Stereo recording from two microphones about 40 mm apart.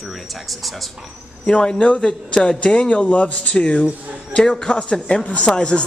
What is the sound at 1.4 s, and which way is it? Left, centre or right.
Speech, left.